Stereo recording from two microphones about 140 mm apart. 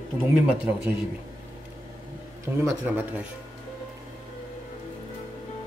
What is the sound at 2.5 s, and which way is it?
Speech, 10° right (ahead or behind).